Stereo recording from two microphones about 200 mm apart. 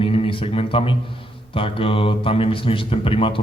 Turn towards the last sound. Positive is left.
turn(degrees=25)  # may be behind; listen again after turning